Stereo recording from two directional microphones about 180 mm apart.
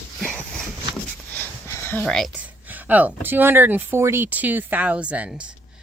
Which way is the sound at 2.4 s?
10° right (ahead or behind).